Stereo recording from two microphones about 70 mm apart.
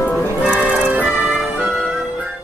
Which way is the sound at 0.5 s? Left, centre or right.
Centre.